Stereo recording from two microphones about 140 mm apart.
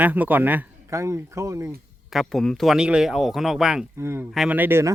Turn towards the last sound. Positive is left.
turn(degrees=-15)  # may be behind; listen again after turning